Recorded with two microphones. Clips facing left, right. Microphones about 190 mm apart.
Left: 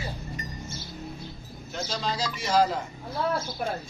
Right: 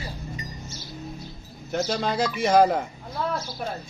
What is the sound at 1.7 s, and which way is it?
Speech, 55° right (ahead or behind).